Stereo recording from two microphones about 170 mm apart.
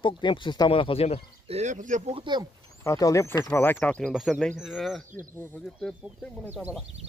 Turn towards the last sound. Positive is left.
turn(degrees=5)  # may be behind; listen again after turning